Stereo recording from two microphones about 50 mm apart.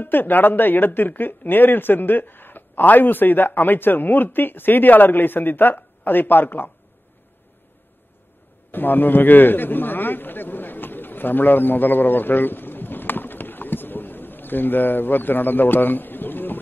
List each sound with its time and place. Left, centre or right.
0.0 s speech: left
8.7 s a man's voice: left